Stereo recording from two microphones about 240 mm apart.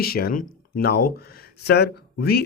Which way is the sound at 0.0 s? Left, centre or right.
Left.